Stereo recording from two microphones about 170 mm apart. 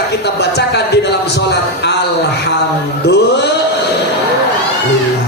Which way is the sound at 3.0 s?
90° left.